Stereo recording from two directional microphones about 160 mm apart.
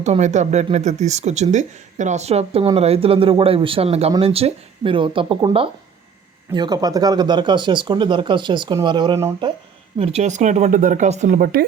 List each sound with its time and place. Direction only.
0.0 s speech: 45° right (ahead or behind); by 9.1 s 30° right (ahead or behind)
10.0 s speech: 40° right (ahead or behind); by 11.6 s 65° right (ahead or behind)